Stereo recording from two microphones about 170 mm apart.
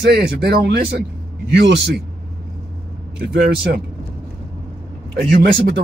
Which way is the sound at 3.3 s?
75° right (ahead or behind).